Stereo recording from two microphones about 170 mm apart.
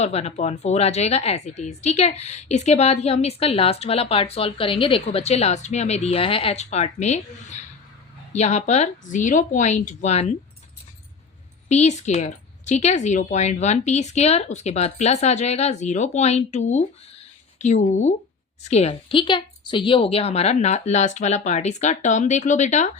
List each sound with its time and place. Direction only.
0.0 s a woman's voice: 40° left (ahead or behind)
11.7 s a woman's voice: 40° left (ahead or behind)